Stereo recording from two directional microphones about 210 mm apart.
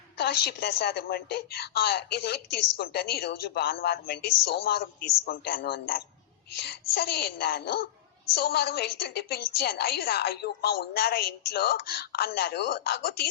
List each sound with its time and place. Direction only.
0.2 s a woman's voice: 50° left (ahead or behind)